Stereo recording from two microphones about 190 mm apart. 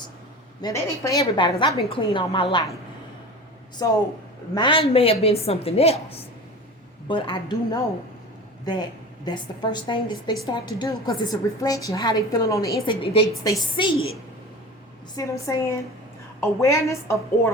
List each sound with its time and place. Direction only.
0.6 s a woman's voice: 20° left (ahead or behind)
3.8 s a woman's voice: 20° left (ahead or behind)
9.2 s a woman's voice: 25° left (ahead or behind)
15.1 s a woman's voice: 15° left (ahead or behind)